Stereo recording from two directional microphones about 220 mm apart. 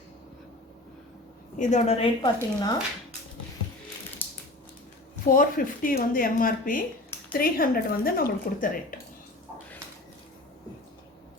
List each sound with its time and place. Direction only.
1.5 s a woman's voice: 30° left (ahead or behind)
4.2 s a sound: 10° left (ahead or behind)
5.3 s speech: 40° left (ahead or behind)